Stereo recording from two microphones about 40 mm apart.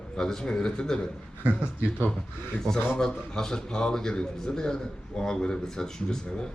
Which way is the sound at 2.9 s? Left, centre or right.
Centre.